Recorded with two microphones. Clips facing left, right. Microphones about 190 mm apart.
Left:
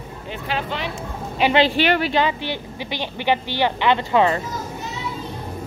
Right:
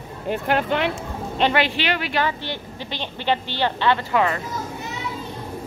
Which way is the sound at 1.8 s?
45° left (ahead or behind).